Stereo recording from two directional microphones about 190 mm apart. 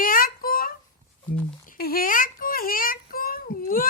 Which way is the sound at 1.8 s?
50° left (ahead or behind).